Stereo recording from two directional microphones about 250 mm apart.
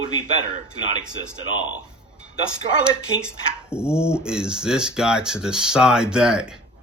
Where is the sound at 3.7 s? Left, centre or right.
Centre.